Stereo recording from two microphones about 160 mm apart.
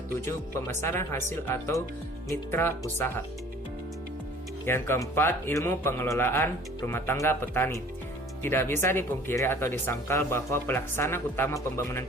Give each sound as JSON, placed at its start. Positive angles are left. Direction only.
{"t": 0.3, "sound": "speech", "side_deg": 15}
{"t": 4.6, "sound": "speech", "side_deg": 15}